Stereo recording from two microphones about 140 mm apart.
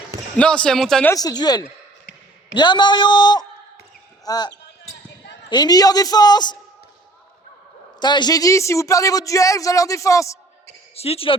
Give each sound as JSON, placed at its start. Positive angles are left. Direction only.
{"t": 0.3, "sound": "speech", "side_deg": 5}
{"t": 1.1, "sound": "a man's voice", "side_deg": 30}
{"t": 7.9, "sound": "a man's voice", "side_deg": 30}
{"t": 10.9, "sound": "speech", "side_deg": 45}